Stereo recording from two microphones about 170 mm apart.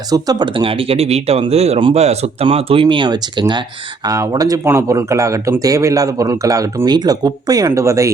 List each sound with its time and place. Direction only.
0.1 s speech: 25° right (ahead or behind)